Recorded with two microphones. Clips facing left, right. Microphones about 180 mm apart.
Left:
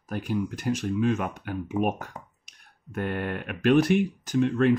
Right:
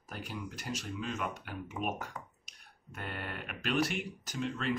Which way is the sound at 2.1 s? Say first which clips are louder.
Left 3 dB; 25° left (ahead or behind).